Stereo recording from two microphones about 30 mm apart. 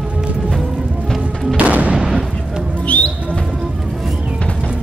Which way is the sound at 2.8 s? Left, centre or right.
Left.